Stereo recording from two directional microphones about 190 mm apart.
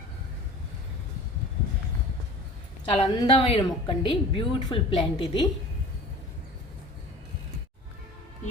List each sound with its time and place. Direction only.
2.8 s a woman's voice: 30° left (ahead or behind)